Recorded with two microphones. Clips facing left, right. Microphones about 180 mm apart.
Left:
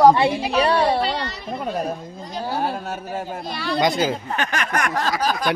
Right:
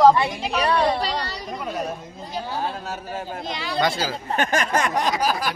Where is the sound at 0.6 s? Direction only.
30° left (ahead or behind).